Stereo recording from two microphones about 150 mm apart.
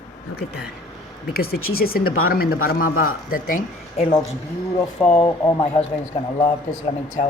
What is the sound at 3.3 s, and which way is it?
Speech, 65° left (ahead or behind).